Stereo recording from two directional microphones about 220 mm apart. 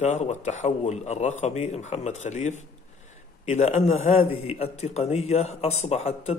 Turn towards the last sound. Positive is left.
turn(degrees=30)  # may be behind; listen again after turning